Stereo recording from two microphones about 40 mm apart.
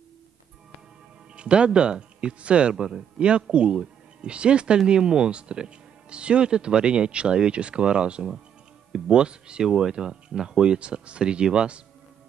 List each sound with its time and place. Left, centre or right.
1.3 s speech: right
2.7 s speech: centre
3.2 s speech: right